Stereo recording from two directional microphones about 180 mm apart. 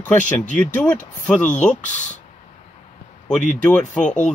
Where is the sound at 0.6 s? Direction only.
5° left (ahead or behind).